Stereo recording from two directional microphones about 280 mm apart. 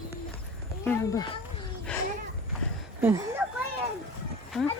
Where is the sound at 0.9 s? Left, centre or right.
Centre.